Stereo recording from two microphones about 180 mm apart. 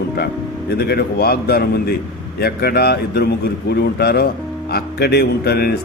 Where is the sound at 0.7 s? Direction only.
60° left (ahead or behind).